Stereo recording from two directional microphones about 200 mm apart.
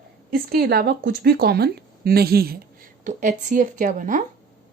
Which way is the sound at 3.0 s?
40° right (ahead or behind).